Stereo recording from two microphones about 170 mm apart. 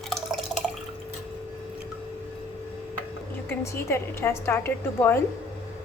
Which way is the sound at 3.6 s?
15° left (ahead or behind).